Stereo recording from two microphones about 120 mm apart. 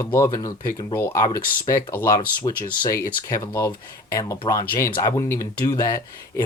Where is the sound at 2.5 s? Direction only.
40° left (ahead or behind).